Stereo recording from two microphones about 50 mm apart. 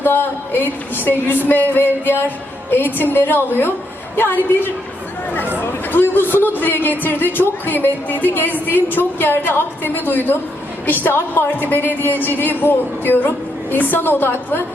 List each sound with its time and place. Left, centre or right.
0.0 s music: left
5.9 s a sound: left
6.6 s music: left
12.6 s a woman's voice: left